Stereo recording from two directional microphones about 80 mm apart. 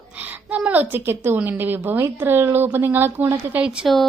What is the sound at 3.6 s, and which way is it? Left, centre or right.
Speech, centre.